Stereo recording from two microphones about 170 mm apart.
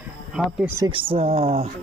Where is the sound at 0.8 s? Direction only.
30° right (ahead or behind).